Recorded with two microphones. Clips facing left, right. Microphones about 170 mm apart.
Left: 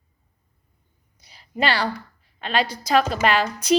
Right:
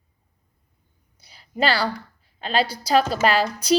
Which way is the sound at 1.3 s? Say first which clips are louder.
Right 1 dB; 35° right (ahead or behind).